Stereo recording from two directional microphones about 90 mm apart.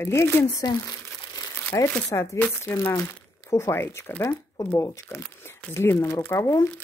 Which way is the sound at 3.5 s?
30° left (ahead or behind).